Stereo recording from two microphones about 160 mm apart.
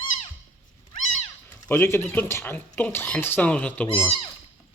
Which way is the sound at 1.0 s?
45° left (ahead or behind).